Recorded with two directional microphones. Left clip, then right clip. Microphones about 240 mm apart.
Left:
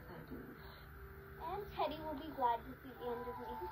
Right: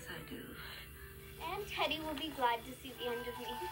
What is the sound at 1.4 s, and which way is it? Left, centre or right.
Music, right.